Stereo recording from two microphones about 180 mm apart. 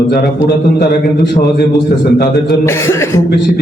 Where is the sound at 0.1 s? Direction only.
60° left (ahead or behind).